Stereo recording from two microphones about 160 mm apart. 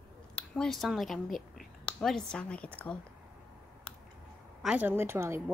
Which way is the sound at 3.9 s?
5° left (ahead or behind).